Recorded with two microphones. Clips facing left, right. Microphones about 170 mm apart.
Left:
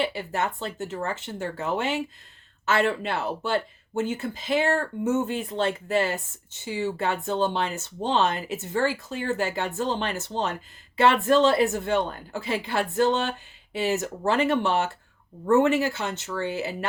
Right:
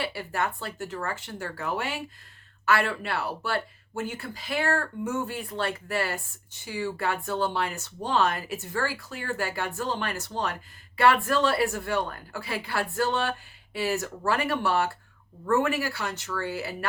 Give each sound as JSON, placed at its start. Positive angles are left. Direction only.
{"t": 0.0, "sound": "speech", "side_deg": 20}